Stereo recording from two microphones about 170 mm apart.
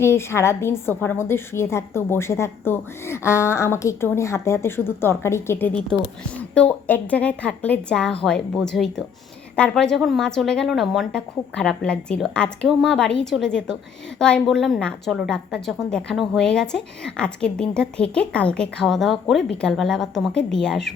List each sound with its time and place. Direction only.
0.0 s a woman's voice: 15° left (ahead or behind)